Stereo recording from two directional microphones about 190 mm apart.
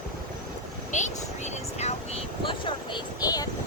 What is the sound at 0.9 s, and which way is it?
Vehicle, 40° left (ahead or behind).